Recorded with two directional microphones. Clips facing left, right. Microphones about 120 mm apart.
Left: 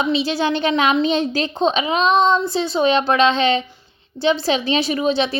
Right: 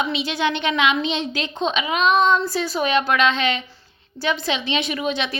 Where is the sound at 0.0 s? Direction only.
30° left (ahead or behind).